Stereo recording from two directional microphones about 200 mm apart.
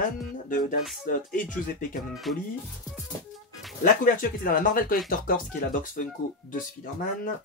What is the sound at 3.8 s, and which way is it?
Speech, 45° left (ahead or behind).